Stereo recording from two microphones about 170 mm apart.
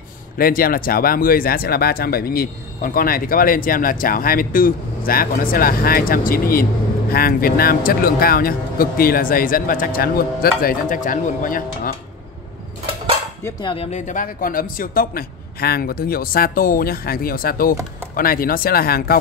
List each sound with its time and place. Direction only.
0.4 s speech: 60° left (ahead or behind)
13.4 s speech: 25° left (ahead or behind); by 19.1 s 65° left (ahead or behind)